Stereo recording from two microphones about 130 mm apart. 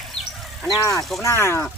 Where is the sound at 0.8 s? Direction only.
25° left (ahead or behind).